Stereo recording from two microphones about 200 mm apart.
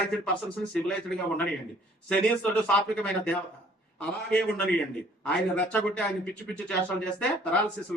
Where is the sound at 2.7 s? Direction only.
5° left (ahead or behind).